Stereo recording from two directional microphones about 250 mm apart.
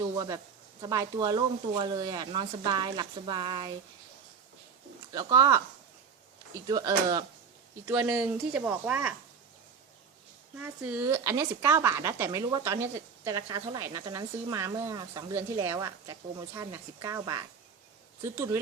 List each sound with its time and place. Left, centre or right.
0.8 s speech: centre
5.1 s speech: centre
10.6 s speech: centre